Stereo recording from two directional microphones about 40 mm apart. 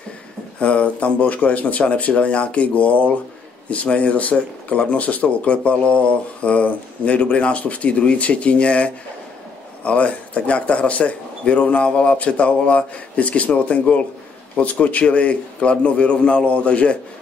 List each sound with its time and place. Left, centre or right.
0.6 s speech: left